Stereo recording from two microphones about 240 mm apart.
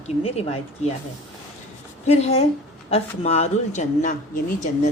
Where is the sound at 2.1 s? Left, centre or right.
Left.